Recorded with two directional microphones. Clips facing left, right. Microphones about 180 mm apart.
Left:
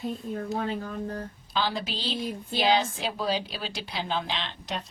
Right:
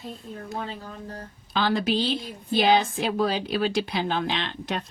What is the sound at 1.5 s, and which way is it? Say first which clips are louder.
A woman's voice: right 6 dB; 55° right (ahead or behind).